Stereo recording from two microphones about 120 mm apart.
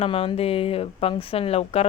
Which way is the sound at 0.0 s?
50° left (ahead or behind).